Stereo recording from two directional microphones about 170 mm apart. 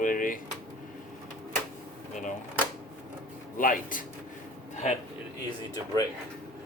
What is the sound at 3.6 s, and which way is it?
Speech, 55° left (ahead or behind).